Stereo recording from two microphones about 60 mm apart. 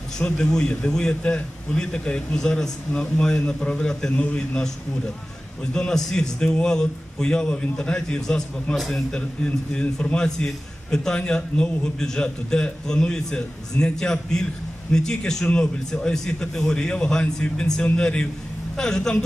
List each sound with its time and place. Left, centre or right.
0.2 s a man's voice: centre
8.7 s a man's voice: centre
9.1 s a man's voice: centre